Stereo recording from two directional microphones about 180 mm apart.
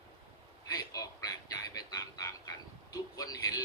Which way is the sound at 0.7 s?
20° left (ahead or behind).